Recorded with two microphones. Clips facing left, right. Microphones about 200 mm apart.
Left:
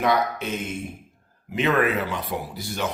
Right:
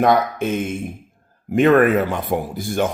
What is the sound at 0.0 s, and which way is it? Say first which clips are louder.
Speech: right 6 dB; 50° right (ahead or behind).